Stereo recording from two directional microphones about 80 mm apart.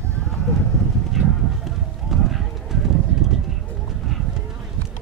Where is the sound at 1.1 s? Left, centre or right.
Centre.